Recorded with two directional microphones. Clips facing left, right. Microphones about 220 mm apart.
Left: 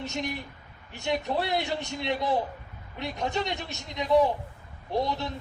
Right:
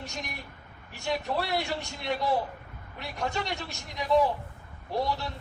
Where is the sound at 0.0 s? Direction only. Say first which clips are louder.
Left 7 dB; 20° left (ahead or behind).